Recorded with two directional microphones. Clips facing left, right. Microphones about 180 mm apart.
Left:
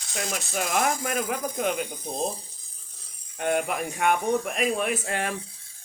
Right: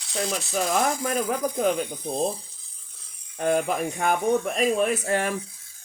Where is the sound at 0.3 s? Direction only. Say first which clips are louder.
Right 2 dB; 35° right (ahead or behind).